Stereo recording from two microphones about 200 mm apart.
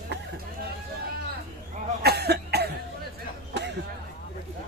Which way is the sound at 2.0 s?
55° right (ahead or behind).